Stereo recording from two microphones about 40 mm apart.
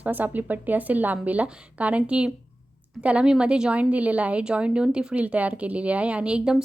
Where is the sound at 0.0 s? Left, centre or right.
Right.